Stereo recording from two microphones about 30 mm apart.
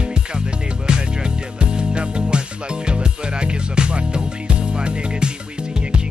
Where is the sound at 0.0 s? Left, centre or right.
Right.